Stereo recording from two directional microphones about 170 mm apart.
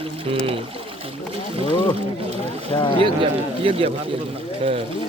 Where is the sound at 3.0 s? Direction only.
30° right (ahead or behind).